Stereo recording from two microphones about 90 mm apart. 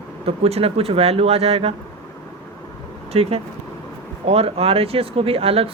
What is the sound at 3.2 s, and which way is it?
Speech, 90° right.